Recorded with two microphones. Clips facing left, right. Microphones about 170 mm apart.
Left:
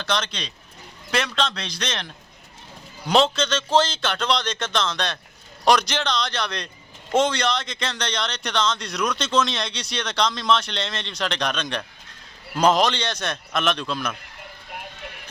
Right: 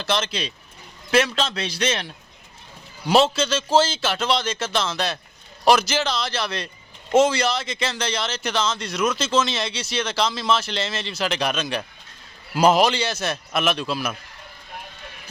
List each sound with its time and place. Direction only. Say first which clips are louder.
0.0 s speech: right 2 dB; 5° right (ahead or behind)
3.1 s a man's voice: right 1 dB; 5° right (ahead or behind)